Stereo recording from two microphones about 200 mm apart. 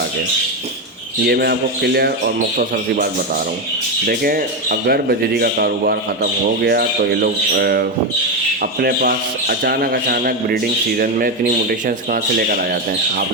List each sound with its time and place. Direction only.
1.3 s a man's voice: 50° right (ahead or behind)